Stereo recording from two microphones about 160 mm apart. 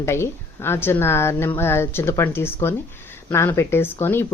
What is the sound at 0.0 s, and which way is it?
A woman's voice, 15° left (ahead or behind).